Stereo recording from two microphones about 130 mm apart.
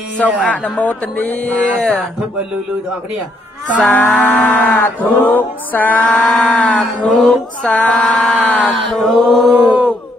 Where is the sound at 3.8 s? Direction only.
15° left (ahead or behind).